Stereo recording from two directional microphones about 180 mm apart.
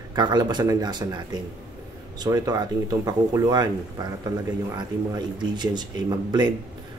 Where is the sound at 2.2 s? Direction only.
20° right (ahead or behind).